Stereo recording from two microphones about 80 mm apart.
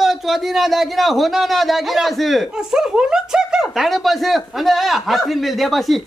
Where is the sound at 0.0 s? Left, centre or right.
Centre.